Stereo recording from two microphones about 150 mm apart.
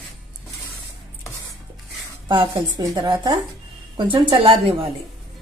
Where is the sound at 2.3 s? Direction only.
35° right (ahead or behind).